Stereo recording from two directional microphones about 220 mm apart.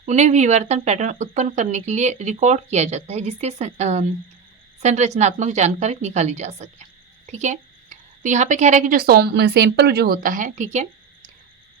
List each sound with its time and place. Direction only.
0.0 s speech: 30° right (ahead or behind)